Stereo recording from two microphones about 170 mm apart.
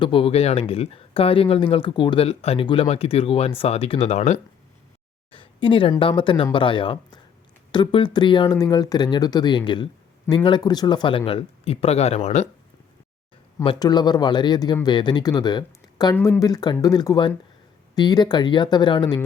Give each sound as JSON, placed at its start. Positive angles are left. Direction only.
{"t": 0.0, "sound": "speech", "side_deg": 30}
{"t": 5.3, "sound": "a sound", "side_deg": 30}
{"t": 6.0, "sound": "speech", "side_deg": 30}
{"t": 13.7, "sound": "speech", "side_deg": 25}
{"t": 16.1, "sound": "speech", "side_deg": 15}